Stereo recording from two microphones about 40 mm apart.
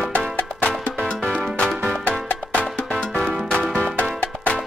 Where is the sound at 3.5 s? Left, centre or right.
Left.